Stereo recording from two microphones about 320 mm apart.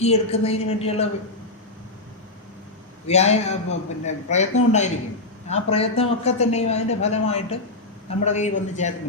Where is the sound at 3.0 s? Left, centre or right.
Left.